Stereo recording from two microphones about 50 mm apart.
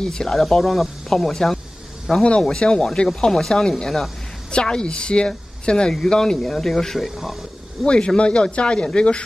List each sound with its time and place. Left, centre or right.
0.0 s speech: centre
2.2 s speech: centre
4.5 s a woman's voice: centre
7.8 s a woman's voice: centre